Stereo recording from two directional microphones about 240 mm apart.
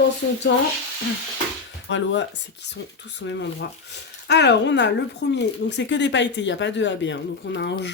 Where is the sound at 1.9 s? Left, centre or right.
Left.